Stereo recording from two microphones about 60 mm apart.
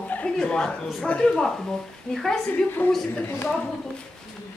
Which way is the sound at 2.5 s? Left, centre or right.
Left.